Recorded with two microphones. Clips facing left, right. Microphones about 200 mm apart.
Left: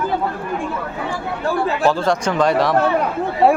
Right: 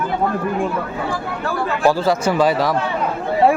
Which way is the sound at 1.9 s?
5° right (ahead or behind).